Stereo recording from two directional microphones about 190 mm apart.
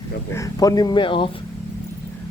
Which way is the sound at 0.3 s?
15° left (ahead or behind).